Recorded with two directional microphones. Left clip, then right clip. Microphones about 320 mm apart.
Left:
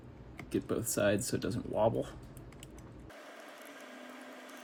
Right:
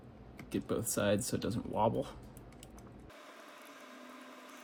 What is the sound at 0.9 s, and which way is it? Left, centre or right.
Speech, centre.